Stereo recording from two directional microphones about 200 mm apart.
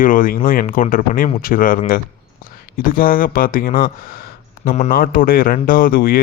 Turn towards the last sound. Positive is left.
turn(degrees=45)  # may be behind; listen again after turning